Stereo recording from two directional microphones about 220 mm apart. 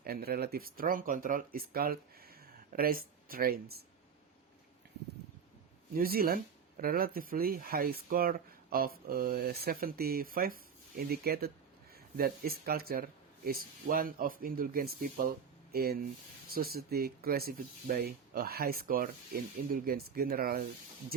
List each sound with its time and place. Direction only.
0.0 s speech: 45° right (ahead or behind)
5.9 s speech: 40° right (ahead or behind)